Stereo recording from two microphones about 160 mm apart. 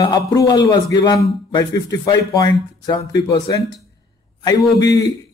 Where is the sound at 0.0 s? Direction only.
25° left (ahead or behind).